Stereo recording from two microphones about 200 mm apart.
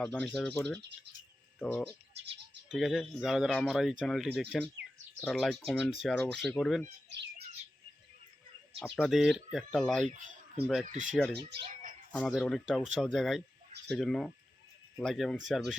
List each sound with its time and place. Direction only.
0.0 s speech: 5° left (ahead or behind)
8.8 s speech: centre (ahead or behind)
10.1 s speech: 40° right (ahead or behind)
10.6 s speech: 5° right (ahead or behind)
10.8 s speech: 40° right (ahead or behind)
11.1 s speech: 5° left (ahead or behind)